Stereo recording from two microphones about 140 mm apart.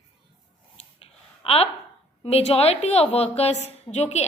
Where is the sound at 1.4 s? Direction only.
45° left (ahead or behind).